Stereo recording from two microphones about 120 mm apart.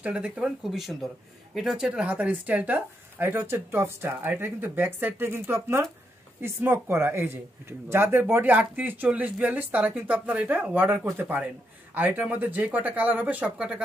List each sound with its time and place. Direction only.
0.0 s speech: 10° right (ahead or behind)